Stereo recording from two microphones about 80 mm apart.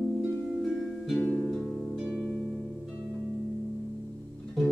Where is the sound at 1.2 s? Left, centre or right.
Centre.